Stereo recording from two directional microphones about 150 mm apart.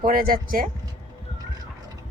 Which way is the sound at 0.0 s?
70° right (ahead or behind).